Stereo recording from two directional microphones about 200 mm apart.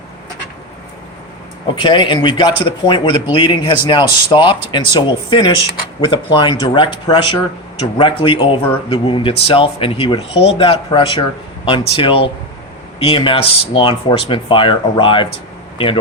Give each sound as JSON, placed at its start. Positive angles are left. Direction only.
{"t": 1.6, "sound": "speech", "side_deg": 25}